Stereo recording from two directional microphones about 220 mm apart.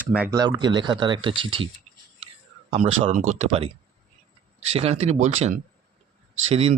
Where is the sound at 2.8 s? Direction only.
35° right (ahead or behind).